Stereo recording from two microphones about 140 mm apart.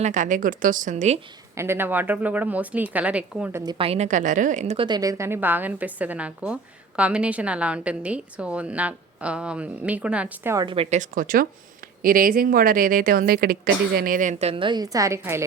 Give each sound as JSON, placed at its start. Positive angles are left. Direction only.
{"t": 0.0, "sound": "a woman's voice", "side_deg": -60}
{"t": 1.5, "sound": "a woman's voice", "side_deg": -15}
{"t": 3.8, "sound": "a woman's voice", "side_deg": -45}
{"t": 4.9, "sound": "a woman's voice", "side_deg": -25}
{"t": 10.7, "sound": "a woman's voice", "side_deg": -40}
{"t": 10.9, "sound": "a woman's voice", "side_deg": -70}